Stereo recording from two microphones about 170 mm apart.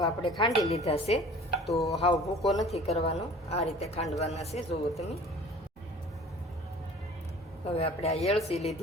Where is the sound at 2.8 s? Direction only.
40° left (ahead or behind).